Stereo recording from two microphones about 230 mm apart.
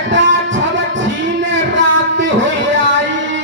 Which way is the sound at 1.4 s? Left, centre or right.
Right.